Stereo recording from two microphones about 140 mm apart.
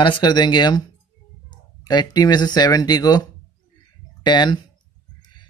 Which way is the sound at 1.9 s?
30° left (ahead or behind).